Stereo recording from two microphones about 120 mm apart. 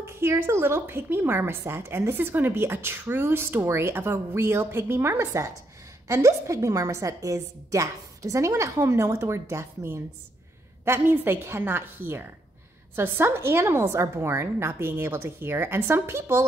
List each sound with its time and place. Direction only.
0.2 s a woman's voice: 20° right (ahead or behind)